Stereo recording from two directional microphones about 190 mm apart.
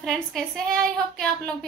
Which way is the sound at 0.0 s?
Centre (ahead or behind).